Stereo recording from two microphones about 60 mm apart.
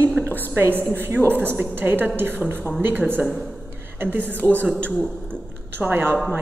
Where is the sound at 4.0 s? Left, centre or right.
Right.